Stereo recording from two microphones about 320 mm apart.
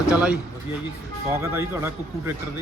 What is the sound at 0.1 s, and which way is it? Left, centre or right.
Speech, centre.